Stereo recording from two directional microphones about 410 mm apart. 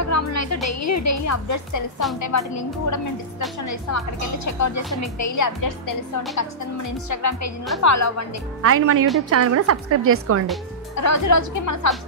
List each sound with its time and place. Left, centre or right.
0.0 s music: left
0.7 s a woman's voice: left
4.5 s a woman's voice: left
8.6 s a woman's voice: right
11.0 s a woman's voice: left